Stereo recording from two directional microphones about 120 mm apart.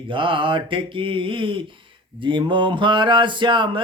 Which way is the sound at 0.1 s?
45° right (ahead or behind).